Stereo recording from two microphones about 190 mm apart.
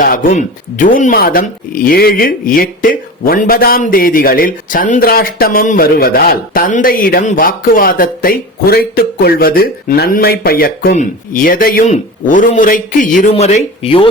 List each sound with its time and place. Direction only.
0.0 s speech: 45° left (ahead or behind)